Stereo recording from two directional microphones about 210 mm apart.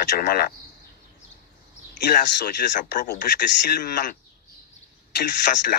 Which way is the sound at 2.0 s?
40° left (ahead or behind).